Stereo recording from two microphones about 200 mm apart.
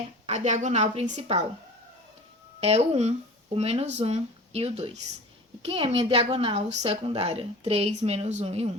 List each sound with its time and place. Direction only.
0.3 s a woman's voice: 35° right (ahead or behind)
2.6 s a woman's voice: 30° right (ahead or behind)